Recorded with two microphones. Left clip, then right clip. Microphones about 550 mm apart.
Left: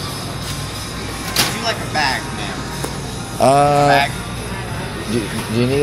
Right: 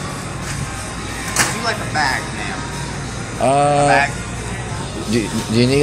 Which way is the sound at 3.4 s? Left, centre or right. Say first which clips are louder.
Left 2 dB; left.